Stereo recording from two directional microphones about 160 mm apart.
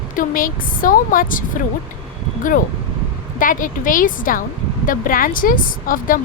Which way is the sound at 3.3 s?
60° left (ahead or behind).